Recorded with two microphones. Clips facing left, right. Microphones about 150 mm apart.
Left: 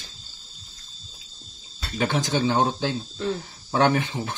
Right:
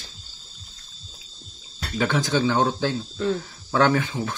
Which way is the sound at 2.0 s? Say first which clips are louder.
Right 1 dB; 20° left (ahead or behind).